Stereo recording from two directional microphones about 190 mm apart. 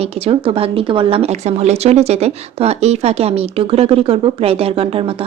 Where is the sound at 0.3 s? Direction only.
30° right (ahead or behind).